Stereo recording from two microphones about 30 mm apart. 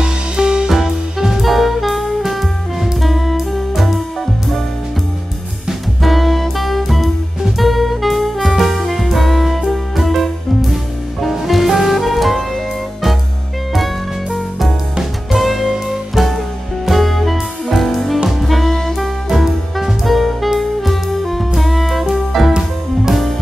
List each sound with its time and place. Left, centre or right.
0.0 s music: right
0.7 s music: centre
1.4 s music: centre
6.0 s music: centre
15.3 s music: centre
15.6 s music: centre
16.9 s music: centre
18.4 s saxophone: centre
19.2 s music: centre